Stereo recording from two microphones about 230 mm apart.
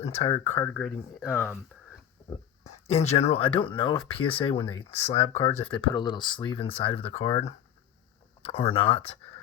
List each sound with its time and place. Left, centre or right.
0.0 s speech: left
0.3 s speech: centre
2.6 s speech: left